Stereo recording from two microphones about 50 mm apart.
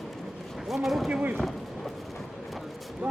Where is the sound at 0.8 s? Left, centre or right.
Centre.